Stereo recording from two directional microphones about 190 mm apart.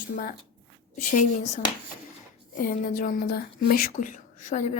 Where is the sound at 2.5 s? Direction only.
45° left (ahead or behind).